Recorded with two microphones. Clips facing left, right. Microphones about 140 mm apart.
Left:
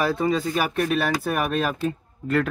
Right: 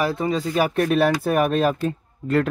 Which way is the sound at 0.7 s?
40° right (ahead or behind).